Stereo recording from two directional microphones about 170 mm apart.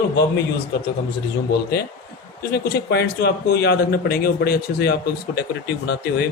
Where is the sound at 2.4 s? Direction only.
70° left (ahead or behind).